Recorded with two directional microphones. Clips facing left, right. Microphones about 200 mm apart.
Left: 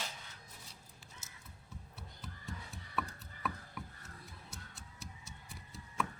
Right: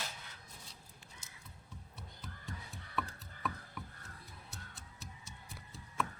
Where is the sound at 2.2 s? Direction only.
Centre (ahead or behind).